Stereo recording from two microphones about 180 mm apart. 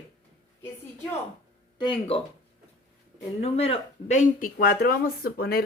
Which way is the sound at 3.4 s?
35° left (ahead or behind).